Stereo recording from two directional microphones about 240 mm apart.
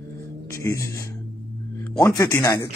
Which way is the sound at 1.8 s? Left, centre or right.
Centre.